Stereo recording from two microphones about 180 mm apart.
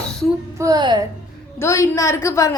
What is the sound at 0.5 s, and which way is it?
Speech, 20° right (ahead or behind).